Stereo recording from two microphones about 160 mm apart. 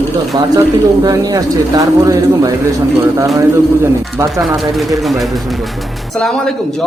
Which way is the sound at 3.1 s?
20° right (ahead or behind).